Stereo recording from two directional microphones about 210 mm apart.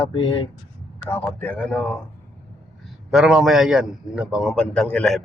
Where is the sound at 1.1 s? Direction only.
5° left (ahead or behind).